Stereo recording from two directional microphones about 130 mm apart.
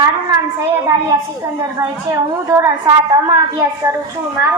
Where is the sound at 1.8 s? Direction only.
25° right (ahead or behind).